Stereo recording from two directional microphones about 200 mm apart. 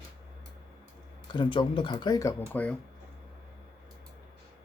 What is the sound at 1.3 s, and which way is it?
Speech, 25° left (ahead or behind).